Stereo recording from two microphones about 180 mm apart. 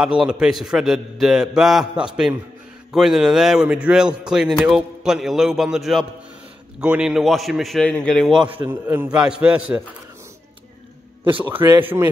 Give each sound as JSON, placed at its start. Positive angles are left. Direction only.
{"t": 0.0, "sound": "a man's voice", "side_deg": -5}
{"t": 11.4, "sound": "speech", "side_deg": -10}